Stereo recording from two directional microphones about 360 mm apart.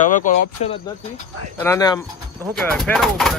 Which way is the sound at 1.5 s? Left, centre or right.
Centre.